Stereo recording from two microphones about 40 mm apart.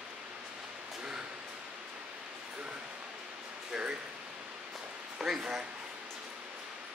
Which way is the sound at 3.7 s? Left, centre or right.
Right.